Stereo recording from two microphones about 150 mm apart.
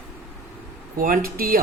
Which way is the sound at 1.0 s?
70° right (ahead or behind).